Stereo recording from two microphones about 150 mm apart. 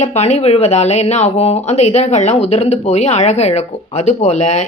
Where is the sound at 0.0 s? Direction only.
45° left (ahead or behind).